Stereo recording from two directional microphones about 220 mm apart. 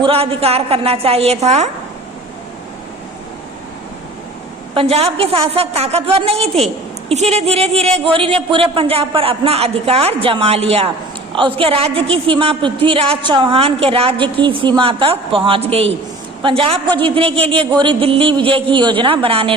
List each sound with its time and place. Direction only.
0.0 s a woman's voice: 25° right (ahead or behind)
4.7 s a woman's voice: 25° right (ahead or behind)